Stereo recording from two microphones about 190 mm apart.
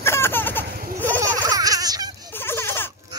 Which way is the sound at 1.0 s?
10° left (ahead or behind).